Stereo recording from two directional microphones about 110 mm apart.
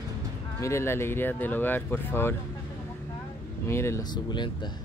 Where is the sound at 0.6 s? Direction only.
25° left (ahead or behind).